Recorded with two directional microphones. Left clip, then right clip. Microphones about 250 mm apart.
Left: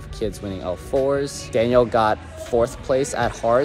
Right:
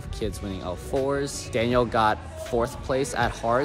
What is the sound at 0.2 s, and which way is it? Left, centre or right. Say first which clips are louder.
Speech: left 5 dB; centre.